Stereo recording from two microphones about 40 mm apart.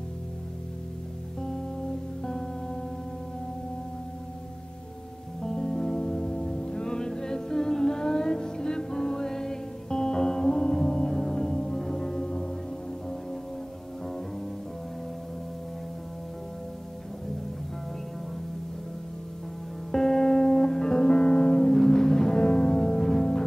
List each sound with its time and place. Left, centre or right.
1.4 s music: centre
5.4 s music: centre
19.9 s music: centre